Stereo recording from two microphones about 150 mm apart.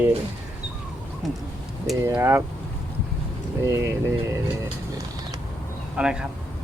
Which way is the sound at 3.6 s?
20° right (ahead or behind).